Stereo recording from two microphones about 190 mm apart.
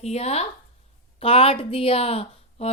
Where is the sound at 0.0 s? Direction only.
35° left (ahead or behind).